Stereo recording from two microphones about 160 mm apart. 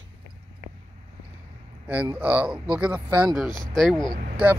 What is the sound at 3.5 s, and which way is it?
Speech, centre (ahead or behind).